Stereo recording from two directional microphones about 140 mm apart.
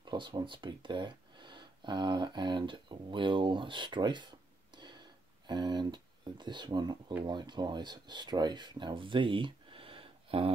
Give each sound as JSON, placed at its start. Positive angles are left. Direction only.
{"t": 0.0, "sound": "speech", "side_deg": -30}